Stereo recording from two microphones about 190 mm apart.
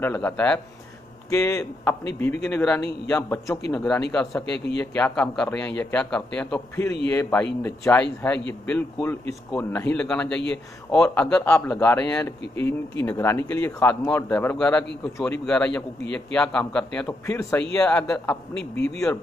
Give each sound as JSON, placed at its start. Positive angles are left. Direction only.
{"t": 0.0, "sound": "speech", "side_deg": 10}